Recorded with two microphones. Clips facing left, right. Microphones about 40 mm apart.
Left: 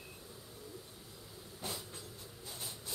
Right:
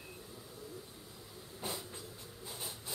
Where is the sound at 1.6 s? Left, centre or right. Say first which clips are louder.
Right 2 dB; centre.